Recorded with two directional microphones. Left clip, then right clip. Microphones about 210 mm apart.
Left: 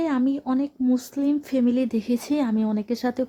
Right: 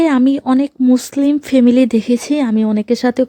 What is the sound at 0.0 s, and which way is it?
Speech, 35° right (ahead or behind).